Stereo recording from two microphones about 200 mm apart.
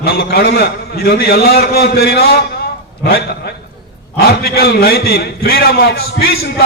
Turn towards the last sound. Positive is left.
turn(degrees=50)  # may be behind; listen again after turning